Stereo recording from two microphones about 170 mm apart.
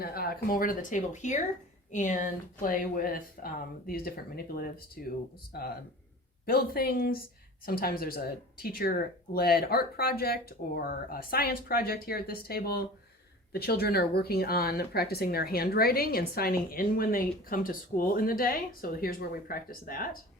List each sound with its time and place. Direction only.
0.0 s speech: 60° left (ahead or behind)